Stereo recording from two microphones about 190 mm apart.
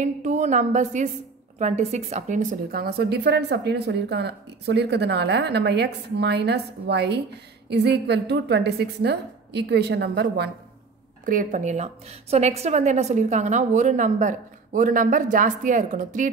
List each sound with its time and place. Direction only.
0.0 s a woman's voice: 40° right (ahead or behind); by 10.5 s 60° right (ahead or behind)
11.2 s a woman's voice: 45° right (ahead or behind)